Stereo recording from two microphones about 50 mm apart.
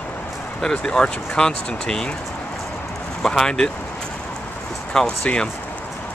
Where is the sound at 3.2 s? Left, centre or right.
Centre.